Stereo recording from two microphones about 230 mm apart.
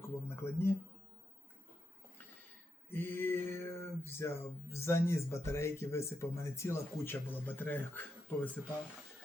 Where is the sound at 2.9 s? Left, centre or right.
Centre.